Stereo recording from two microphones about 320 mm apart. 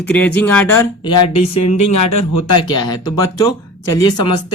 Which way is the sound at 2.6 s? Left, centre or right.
Centre.